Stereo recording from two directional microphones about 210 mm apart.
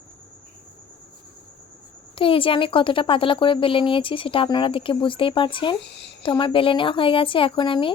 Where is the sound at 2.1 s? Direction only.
25° left (ahead or behind).